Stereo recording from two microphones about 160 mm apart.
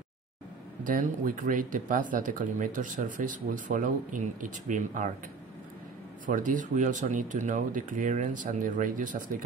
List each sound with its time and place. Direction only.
0.8 s speech: 55° right (ahead or behind)
6.2 s speech: 55° right (ahead or behind)